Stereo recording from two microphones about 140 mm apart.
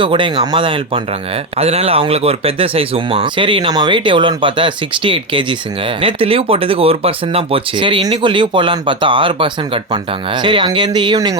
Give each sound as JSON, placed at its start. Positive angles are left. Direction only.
{"t": 0.0, "sound": "speech", "side_deg": -35}